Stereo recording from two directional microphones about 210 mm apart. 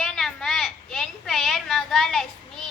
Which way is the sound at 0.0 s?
Centre (ahead or behind).